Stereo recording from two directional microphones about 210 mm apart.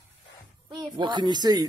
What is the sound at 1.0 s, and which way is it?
Speech, 20° right (ahead or behind).